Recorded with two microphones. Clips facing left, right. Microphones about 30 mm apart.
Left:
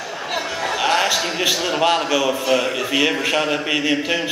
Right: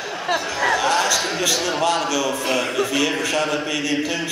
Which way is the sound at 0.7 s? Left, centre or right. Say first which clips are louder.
Left 5 dB; left.